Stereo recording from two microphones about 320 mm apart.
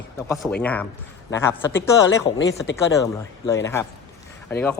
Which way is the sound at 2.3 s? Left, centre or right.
Left.